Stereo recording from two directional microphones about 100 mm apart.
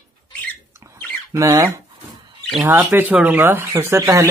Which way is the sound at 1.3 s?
35° right (ahead or behind).